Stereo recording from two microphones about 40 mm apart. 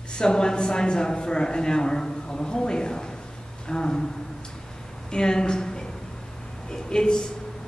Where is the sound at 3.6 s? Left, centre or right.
Centre.